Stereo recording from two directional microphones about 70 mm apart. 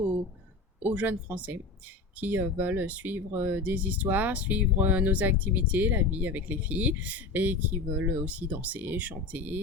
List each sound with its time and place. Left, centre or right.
0.9 s speech: right